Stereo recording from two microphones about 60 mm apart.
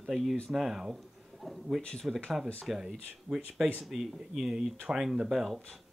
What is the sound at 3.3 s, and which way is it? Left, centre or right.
Speech, right.